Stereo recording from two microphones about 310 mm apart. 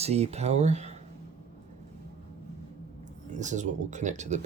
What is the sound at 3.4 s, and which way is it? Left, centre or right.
Speech, right.